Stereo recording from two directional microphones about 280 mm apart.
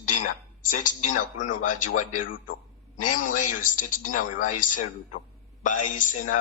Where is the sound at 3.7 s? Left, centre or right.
Left.